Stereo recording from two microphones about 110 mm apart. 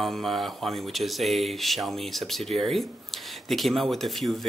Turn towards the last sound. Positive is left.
turn(degrees=0)  # may be behind; listen again after turning